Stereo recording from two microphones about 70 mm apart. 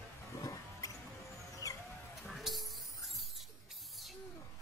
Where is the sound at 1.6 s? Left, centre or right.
Left.